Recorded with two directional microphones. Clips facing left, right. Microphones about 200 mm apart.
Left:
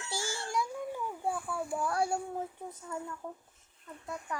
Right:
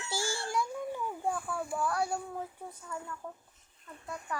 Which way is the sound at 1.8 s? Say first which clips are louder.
Left 1 dB; 25° left (ahead or behind).